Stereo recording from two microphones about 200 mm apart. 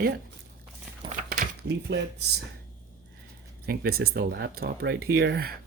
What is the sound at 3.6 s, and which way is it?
Speech, 50° right (ahead or behind).